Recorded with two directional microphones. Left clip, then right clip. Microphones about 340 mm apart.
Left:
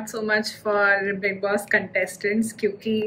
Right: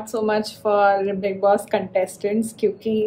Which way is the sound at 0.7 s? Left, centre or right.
Centre.